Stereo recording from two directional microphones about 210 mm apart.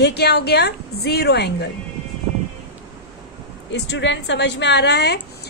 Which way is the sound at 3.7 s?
60° left (ahead or behind).